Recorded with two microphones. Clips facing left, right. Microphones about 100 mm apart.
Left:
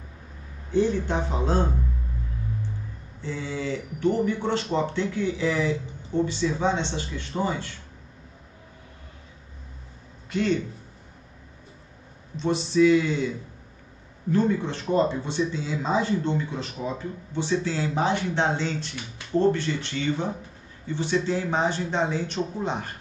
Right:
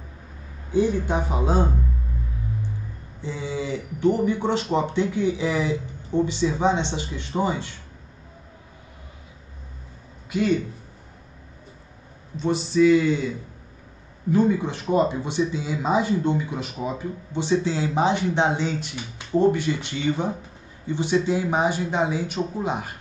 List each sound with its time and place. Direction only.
0.7 s speech: 10° right (ahead or behind)
3.2 s speech: 15° right (ahead or behind)
10.3 s speech: 5° right (ahead or behind)
12.4 s speech: centre (ahead or behind)
14.3 s speech: 15° right (ahead or behind)